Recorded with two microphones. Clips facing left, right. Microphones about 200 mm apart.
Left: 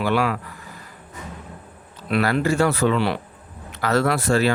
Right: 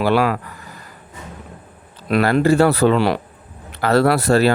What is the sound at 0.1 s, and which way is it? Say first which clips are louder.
Speech: right 4 dB; 75° right (ahead or behind).